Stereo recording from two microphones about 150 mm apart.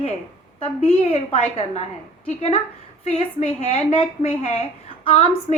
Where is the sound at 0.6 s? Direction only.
40° left (ahead or behind).